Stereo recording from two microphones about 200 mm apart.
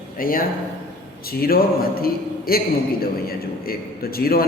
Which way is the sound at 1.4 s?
50° left (ahead or behind).